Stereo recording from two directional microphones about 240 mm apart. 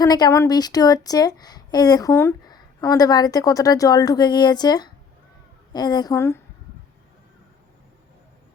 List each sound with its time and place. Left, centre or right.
0.0 s a woman's voice: centre